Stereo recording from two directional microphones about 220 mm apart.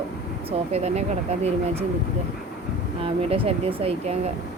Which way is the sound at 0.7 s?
30° right (ahead or behind).